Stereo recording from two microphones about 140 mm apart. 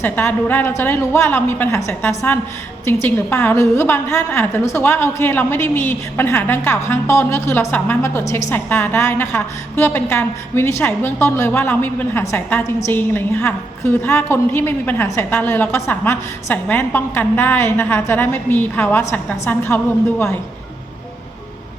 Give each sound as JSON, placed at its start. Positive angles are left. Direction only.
{"t": 0.0, "sound": "a woman's voice", "side_deg": 15}